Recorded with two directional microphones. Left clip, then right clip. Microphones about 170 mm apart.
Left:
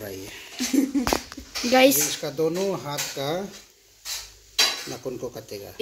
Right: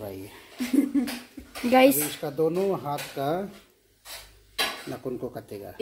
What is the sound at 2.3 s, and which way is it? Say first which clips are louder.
Speech: right 2 dB; 30° right (ahead or behind).